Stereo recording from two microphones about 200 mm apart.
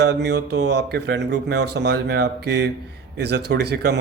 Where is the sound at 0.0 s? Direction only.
55° right (ahead or behind).